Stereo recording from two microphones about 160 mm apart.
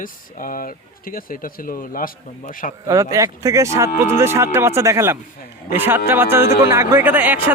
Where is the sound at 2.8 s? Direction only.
20° right (ahead or behind).